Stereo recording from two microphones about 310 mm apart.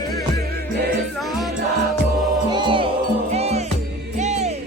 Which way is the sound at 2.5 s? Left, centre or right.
Centre.